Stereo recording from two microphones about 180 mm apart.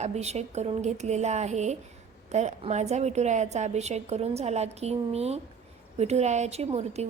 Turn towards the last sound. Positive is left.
turn(degrees=-35)  # may be behind; listen again after turning